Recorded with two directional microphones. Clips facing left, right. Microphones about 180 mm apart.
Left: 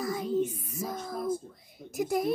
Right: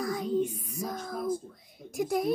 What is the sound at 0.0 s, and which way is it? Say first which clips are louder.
Music: even; centre (ahead or behind).